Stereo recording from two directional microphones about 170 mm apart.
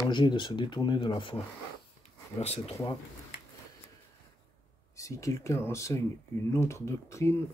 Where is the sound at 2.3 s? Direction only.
40° left (ahead or behind).